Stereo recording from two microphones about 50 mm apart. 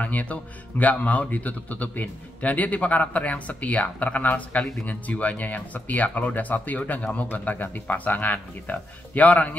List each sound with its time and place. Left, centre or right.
0.0 s speech: left